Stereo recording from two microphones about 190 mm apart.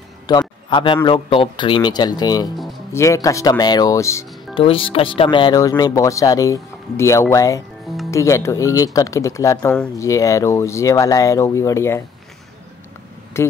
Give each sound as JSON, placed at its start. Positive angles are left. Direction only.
{"t": 0.3, "sound": "a sound", "side_deg": 25}
{"t": 1.0, "sound": "speech", "side_deg": 30}
{"t": 4.6, "sound": "speech", "side_deg": 30}
{"t": 13.4, "sound": "a man's voice", "side_deg": 15}